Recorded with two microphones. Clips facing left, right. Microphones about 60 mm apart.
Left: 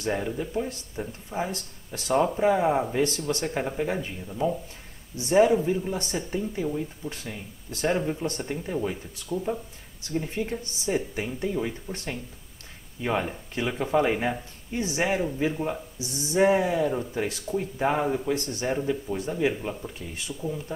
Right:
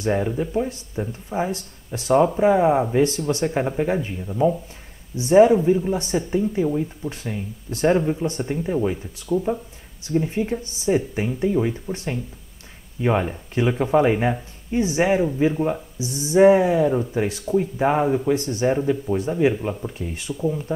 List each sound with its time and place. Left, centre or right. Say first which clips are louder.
0.1 s speech: right 6 dB; centre